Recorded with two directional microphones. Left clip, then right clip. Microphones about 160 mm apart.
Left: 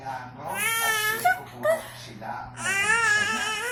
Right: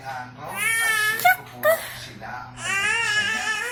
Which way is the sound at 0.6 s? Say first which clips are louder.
Right 4 dB; 20° left (ahead or behind).